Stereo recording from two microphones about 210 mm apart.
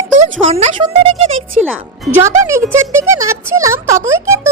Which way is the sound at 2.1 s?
10° right (ahead or behind).